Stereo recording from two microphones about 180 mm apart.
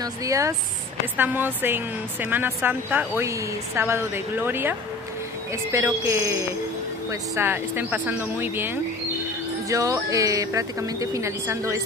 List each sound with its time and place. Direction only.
0.0 s a woman's voice: 20° right (ahead or behind)